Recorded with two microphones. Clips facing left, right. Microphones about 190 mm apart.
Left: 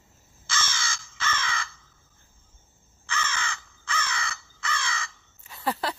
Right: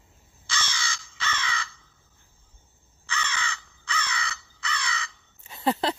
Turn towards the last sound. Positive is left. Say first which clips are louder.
# right 4 dB
turn(degrees=-20)  # may be behind; listen again after turning